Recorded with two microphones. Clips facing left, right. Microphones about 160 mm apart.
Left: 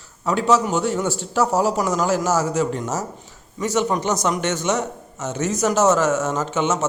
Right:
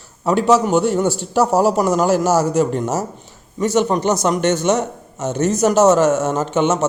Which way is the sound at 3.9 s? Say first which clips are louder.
Right 4 dB; 35° right (ahead or behind).